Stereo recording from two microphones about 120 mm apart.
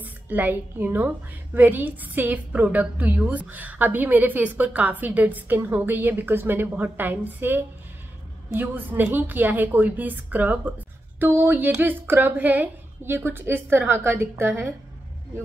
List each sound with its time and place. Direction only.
0.0 s a woman's voice: 15° right (ahead or behind)